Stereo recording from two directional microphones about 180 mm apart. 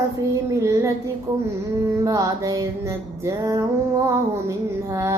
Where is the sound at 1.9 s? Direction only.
15° right (ahead or behind).